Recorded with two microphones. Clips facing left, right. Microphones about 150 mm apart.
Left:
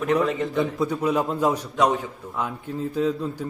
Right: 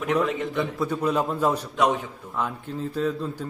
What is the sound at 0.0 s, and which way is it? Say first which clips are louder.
Speech: left 2 dB; 5° left (ahead or behind).